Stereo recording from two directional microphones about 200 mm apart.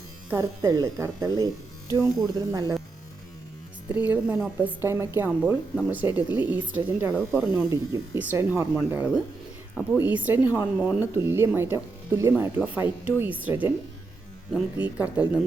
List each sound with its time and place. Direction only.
0.3 s speech: 15° right (ahead or behind)
3.8 s speech: 5° right (ahead or behind)